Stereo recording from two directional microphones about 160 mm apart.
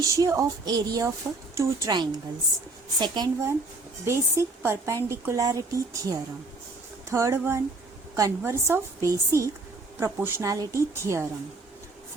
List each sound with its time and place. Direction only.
0.0 s a woman's voice: 20° right (ahead or behind)